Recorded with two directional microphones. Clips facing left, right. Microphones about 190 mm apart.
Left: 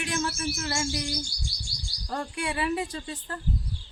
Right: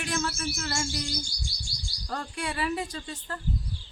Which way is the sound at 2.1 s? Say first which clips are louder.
Left 2 dB; 25° left (ahead or behind).